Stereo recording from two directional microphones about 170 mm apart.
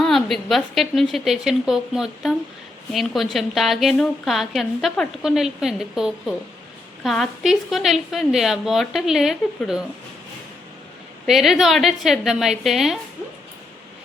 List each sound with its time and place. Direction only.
0.0 s a woman's voice: centre (ahead or behind)
11.3 s a woman's voice: centre (ahead or behind)